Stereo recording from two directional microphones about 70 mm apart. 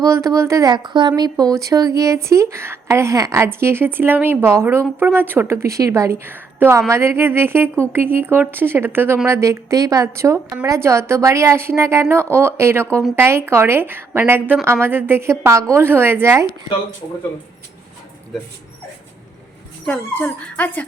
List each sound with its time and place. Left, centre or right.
0.0 s speech: right
0.6 s speech: right
1.5 s speech: right
3.3 s a woman's voice: right
6.2 s a woman's voice: right
9.2 s speech: right
10.7 s a woman's voice: right
20.1 s speech: left